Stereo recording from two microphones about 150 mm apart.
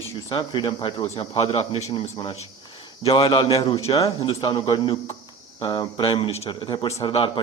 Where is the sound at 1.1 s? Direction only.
40° left (ahead or behind).